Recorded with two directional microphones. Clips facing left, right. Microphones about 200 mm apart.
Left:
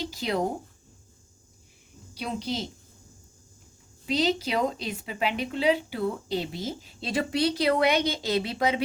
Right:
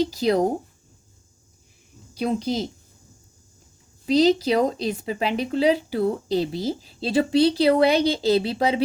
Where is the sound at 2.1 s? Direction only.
45° right (ahead or behind).